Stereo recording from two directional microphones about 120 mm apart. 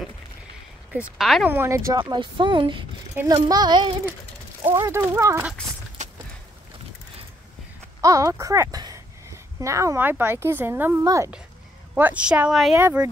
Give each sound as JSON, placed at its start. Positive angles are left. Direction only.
{"t": 0.9, "sound": "speech", "side_deg": 0}
{"t": 1.5, "sound": "speech", "side_deg": -25}
{"t": 2.0, "sound": "speech", "side_deg": -40}
{"t": 4.7, "sound": "speech", "side_deg": -20}
{"t": 8.0, "sound": "speech", "side_deg": -25}
{"t": 12.7, "sound": "speech", "side_deg": -20}